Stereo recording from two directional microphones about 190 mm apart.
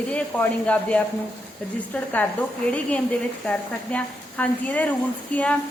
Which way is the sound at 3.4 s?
5° left (ahead or behind).